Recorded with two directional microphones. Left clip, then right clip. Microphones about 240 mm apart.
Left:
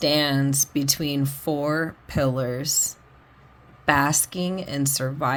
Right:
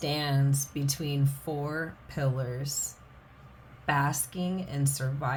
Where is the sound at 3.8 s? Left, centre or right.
Left.